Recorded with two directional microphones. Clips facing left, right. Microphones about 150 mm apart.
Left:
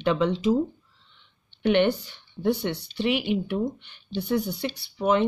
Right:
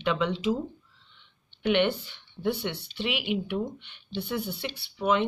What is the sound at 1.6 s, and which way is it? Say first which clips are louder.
Speech: left 3 dB; 40° left (ahead or behind).